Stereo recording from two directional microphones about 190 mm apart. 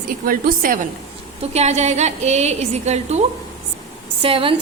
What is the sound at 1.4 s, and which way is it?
A woman's voice, 35° right (ahead or behind).